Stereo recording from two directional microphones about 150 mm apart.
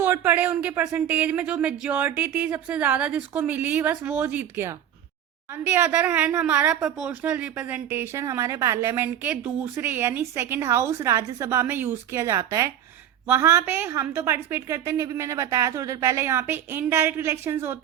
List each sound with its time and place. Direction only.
0.0 s a woman's voice: 15° right (ahead or behind)